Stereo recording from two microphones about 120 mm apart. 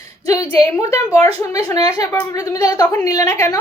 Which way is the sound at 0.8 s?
25° left (ahead or behind).